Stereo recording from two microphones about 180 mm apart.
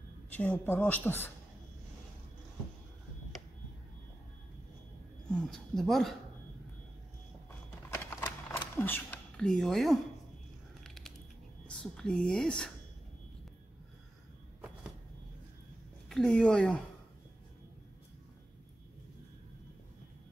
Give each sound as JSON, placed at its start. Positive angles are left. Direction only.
{"t": 0.3, "sound": "a woman's voice", "side_deg": 10}
{"t": 5.3, "sound": "speech", "side_deg": 0}
{"t": 8.2, "sound": "a sound", "side_deg": 15}
{"t": 11.6, "sound": "speech", "side_deg": 5}
{"t": 16.1, "sound": "speech", "side_deg": 5}